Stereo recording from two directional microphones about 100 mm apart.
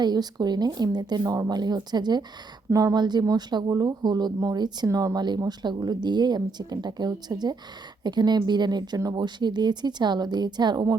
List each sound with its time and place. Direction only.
0.0 s speech: 45° right (ahead or behind)
2.7 s speech: 35° right (ahead or behind)
3.0 s speech: 45° right (ahead or behind)